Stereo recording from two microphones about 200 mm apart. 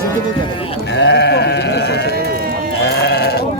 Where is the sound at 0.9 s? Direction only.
60° left (ahead or behind).